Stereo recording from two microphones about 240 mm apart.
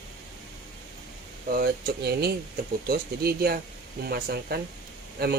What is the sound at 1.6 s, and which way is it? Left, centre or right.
Speech, right.